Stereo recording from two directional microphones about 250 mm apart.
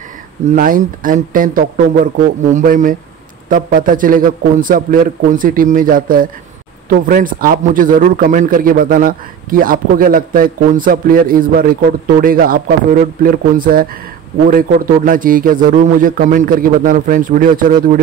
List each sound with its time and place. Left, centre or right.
0.5 s a man's voice: right